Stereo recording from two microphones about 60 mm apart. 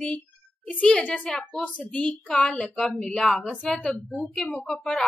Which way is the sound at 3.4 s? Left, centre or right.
Centre.